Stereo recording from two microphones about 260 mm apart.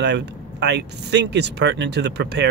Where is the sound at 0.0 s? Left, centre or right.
Right.